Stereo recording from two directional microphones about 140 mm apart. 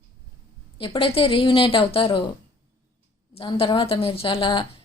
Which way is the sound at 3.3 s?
40° left (ahead or behind).